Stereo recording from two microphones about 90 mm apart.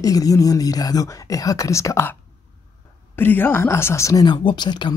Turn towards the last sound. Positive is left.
turn(degrees=55)  # may be behind; listen again after turning